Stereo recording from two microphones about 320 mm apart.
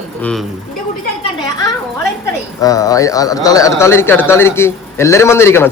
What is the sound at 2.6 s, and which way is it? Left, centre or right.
Speech, centre.